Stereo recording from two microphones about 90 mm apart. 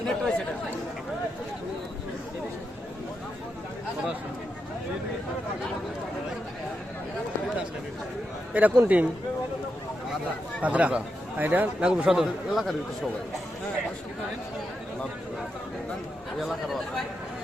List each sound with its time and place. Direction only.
0.0 s chatter: 10° left (ahead or behind)
8.5 s a man's voice: 20° right (ahead or behind)
10.6 s speech: 15° right (ahead or behind)
11.9 s a man's voice: 5° right (ahead or behind)
16.4 s a man's voice: centre (ahead or behind)